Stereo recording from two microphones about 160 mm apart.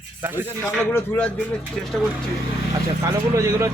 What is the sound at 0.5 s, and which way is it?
Speech, 15° left (ahead or behind).